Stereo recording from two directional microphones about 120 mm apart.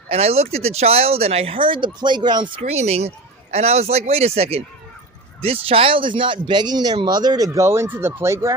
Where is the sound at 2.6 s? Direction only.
60° right (ahead or behind).